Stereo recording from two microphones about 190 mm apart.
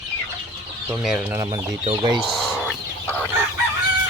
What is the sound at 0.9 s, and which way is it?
Speech, centre (ahead or behind).